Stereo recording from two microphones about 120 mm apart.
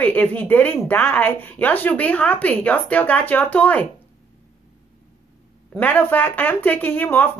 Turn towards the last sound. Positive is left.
turn(degrees=15)  # may be behind; listen again after turning